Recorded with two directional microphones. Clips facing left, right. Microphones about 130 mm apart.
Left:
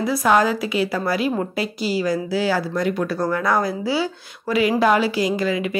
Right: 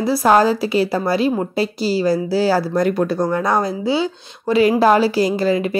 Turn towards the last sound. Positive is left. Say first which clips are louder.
# right 4 dB
turn(degrees=-35)  # may be behind; listen again after turning